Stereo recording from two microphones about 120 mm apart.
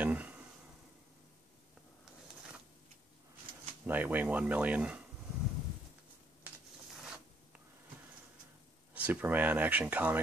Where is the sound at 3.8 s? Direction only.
15° right (ahead or behind).